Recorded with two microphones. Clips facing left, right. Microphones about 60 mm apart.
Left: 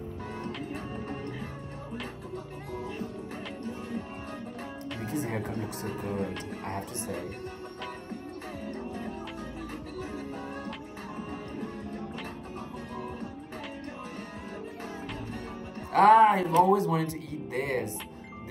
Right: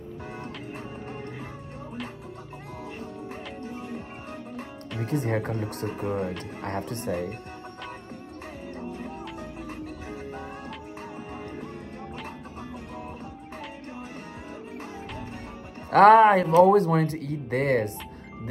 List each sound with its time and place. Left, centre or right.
5.0 s speech: right
15.9 s music: right
16.6 s speech: right